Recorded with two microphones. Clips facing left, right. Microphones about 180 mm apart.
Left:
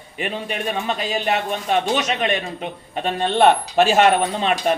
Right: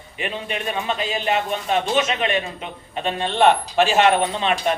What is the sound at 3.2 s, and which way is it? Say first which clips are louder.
Speech: left 2 dB; 40° left (ahead or behind).